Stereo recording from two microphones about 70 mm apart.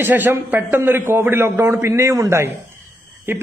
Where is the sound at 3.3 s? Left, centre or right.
Right.